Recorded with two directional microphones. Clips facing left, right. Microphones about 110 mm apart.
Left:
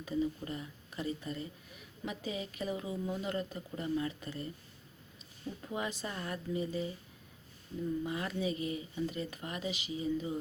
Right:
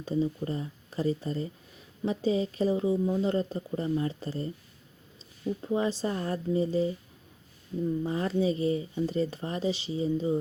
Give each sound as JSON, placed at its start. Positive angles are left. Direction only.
{"t": 0.0, "sound": "speech", "side_deg": -30}
{"t": 5.6, "sound": "speech", "side_deg": -30}
{"t": 8.0, "sound": "speech", "side_deg": -35}